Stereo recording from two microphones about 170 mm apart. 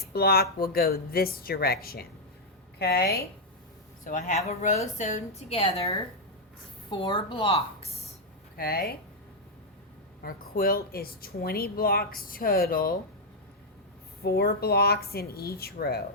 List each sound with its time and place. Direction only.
0.0 s speech: 65° left (ahead or behind)
4.0 s a woman's voice: 50° left (ahead or behind)
6.9 s speech: 25° left (ahead or behind)
8.5 s speech: 60° left (ahead or behind)
10.2 s speech: 60° left (ahead or behind)
14.2 s speech: 65° left (ahead or behind)